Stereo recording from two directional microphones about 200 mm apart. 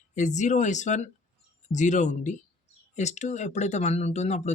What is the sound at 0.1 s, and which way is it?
Speech, 35° left (ahead or behind).